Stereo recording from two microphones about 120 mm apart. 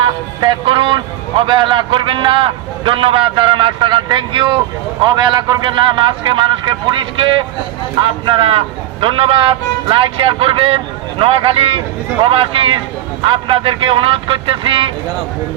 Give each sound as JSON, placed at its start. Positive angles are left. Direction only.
{"t": 0.0, "sound": "a man's voice", "side_deg": -45}